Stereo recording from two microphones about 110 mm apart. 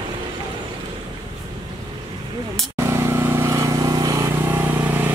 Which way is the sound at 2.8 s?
25° right (ahead or behind).